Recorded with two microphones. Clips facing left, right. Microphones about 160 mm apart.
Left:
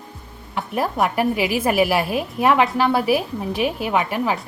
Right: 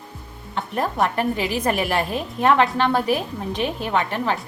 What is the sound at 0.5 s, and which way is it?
A woman's voice, 5° left (ahead or behind).